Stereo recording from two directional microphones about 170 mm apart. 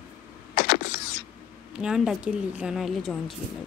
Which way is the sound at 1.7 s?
5° right (ahead or behind).